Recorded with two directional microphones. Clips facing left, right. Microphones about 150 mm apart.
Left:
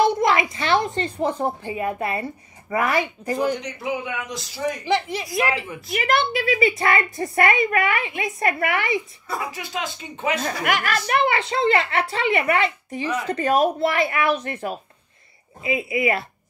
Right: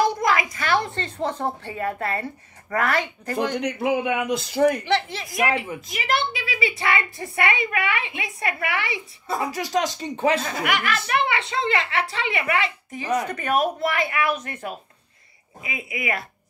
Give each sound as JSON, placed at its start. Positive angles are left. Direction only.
{"t": 0.0, "sound": "a woman's voice", "side_deg": 25}
{"t": 3.5, "sound": "speech", "side_deg": -60}
{"t": 4.8, "sound": "speech", "side_deg": 15}
{"t": 5.9, "sound": "a woman's voice", "side_deg": 50}
{"t": 9.4, "sound": "speech", "side_deg": -40}
{"t": 10.6, "sound": "a woman's voice", "side_deg": 45}
{"t": 13.0, "sound": "speech", "side_deg": -35}
{"t": 13.3, "sound": "a woman's voice", "side_deg": 30}